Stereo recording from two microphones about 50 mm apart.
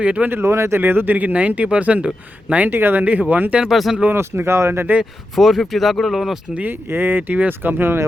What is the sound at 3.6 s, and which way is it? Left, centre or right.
Speech, centre.